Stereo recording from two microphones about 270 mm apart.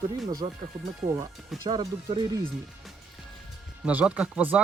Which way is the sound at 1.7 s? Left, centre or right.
Centre.